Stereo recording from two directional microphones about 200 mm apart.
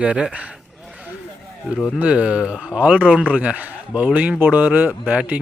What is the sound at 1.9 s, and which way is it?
A man's voice, 5° right (ahead or behind).